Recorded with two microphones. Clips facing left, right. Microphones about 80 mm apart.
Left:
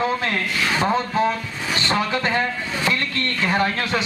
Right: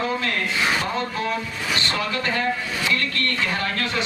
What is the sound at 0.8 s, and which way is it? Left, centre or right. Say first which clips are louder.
A man's voice: left 6 dB; left.